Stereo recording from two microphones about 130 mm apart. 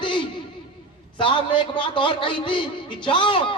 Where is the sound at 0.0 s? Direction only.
40° left (ahead or behind).